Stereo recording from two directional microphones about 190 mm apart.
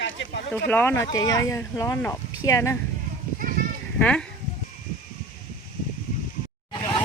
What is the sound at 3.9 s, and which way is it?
Speech, 5° left (ahead or behind).